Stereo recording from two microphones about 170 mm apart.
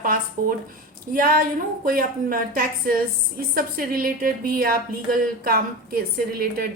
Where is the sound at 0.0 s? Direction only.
55° right (ahead or behind).